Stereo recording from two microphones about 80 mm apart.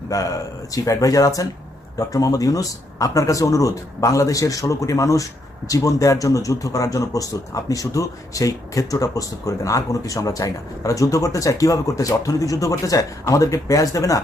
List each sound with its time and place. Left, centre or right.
0.1 s speech: left